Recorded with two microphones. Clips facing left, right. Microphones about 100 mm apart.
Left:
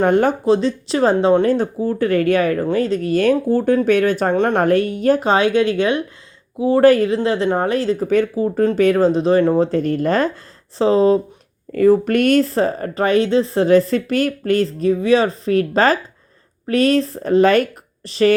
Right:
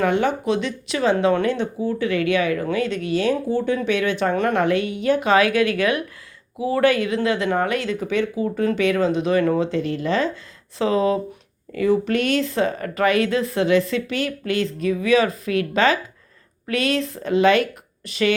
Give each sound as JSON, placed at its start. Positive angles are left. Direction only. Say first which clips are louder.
{"t": 0.0, "sound": "speech", "louder": "left 5 dB", "side_deg": 45}
{"t": 10.8, "sound": "speech", "louder": "left 6 dB", "side_deg": 30}
{"t": 11.7, "sound": "speech", "louder": "left 6 dB", "side_deg": 45}